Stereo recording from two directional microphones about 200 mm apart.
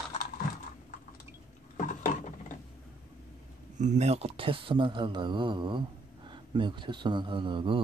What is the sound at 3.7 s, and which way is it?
Speech, 35° right (ahead or behind).